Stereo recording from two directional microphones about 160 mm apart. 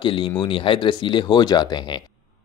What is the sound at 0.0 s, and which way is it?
Speech, 30° left (ahead or behind).